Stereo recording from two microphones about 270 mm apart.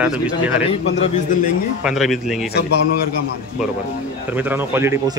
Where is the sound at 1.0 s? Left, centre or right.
Left.